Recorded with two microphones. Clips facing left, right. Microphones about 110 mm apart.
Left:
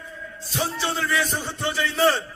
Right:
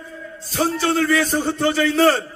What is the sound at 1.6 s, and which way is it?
Speech, 65° right (ahead or behind).